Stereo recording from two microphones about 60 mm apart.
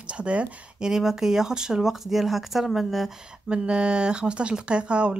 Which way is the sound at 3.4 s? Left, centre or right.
Centre.